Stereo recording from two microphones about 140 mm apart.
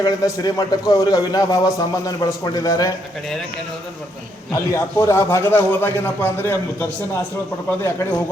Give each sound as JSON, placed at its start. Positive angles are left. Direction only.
{"t": 0.0, "sound": "a man's voice", "side_deg": 30}
{"t": 4.5, "sound": "a man's voice", "side_deg": 20}